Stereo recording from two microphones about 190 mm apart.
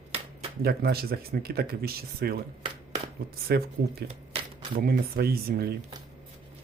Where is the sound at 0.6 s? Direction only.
55° right (ahead or behind).